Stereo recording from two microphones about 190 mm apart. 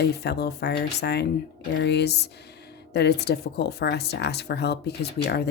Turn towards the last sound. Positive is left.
turn(degrees=60)  # may be behind; listen again after turning